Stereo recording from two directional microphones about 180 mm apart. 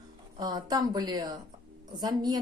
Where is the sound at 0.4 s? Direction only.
20° right (ahead or behind).